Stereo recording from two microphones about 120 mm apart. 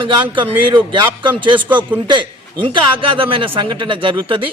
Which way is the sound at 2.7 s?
45° right (ahead or behind).